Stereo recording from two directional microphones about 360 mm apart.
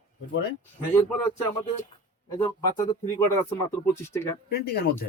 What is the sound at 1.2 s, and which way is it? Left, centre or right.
Speech, centre.